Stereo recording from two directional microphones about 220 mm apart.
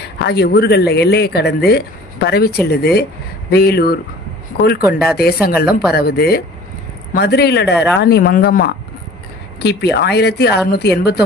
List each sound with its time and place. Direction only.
0.0 s speech: 50° left (ahead or behind)